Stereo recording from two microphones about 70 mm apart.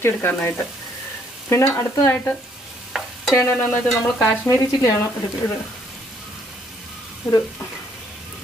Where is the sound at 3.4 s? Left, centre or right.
Left.